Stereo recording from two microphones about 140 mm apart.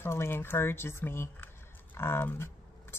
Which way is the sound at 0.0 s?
15° left (ahead or behind).